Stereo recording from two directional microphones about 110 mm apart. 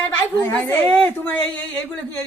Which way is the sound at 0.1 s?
15° left (ahead or behind).